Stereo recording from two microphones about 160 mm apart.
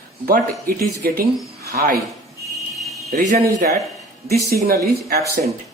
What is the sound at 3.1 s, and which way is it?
Speech, 60° right (ahead or behind).